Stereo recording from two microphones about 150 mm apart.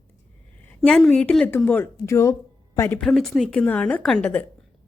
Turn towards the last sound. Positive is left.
turn(degrees=10)  # may be behind; listen again after turning